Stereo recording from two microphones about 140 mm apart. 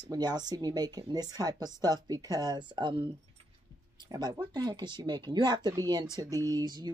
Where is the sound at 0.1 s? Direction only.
30° right (ahead or behind).